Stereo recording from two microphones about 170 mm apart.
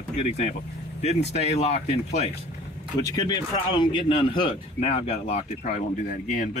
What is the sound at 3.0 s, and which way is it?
Speech, 20° left (ahead or behind).